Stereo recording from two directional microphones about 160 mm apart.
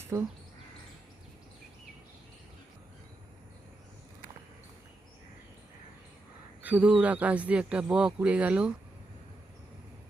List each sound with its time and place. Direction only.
0.0 s speech: 15° right (ahead or behind)
6.6 s a man's voice: 10° right (ahead or behind)